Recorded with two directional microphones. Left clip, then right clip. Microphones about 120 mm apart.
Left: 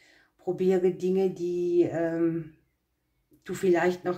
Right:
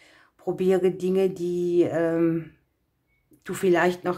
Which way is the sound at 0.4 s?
40° right (ahead or behind).